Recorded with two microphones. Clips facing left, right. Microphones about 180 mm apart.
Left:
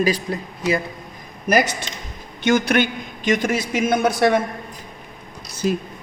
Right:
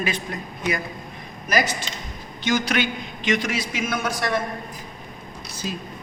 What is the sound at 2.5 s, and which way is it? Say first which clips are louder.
A man's voice: left 5 dB; 55° left (ahead or behind).